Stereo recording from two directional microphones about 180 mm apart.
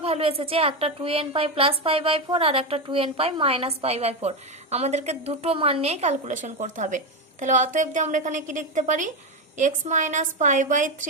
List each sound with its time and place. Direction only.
0.0 s a woman's voice: 30° right (ahead or behind)